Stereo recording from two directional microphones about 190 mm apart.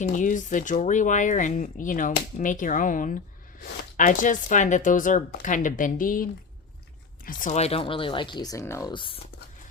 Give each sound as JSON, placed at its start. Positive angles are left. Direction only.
{"t": 0.0, "sound": "speech", "side_deg": 40}
{"t": 7.3, "sound": "speech", "side_deg": 45}
{"t": 8.9, "sound": "speech", "side_deg": 25}